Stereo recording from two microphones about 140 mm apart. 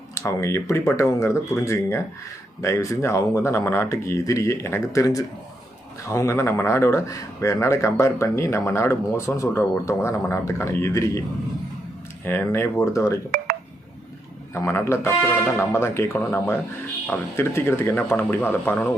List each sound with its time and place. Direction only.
0.1 s speech: 20° left (ahead or behind)
12.2 s speech: 15° left (ahead or behind)
14.5 s speech: 15° left (ahead or behind)